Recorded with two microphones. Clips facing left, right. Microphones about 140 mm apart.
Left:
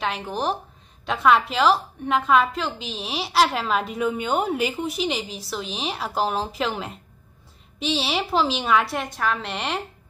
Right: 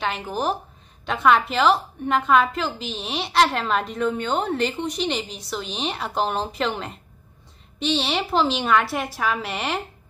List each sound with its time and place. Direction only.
0.0 s a woman's voice: centre (ahead or behind)